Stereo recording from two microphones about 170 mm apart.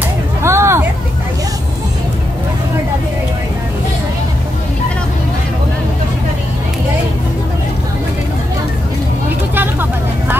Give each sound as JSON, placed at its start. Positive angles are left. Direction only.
{"t": 0.4, "sound": "hubbub", "side_deg": -15}
{"t": 9.6, "sound": "vehicle", "side_deg": -10}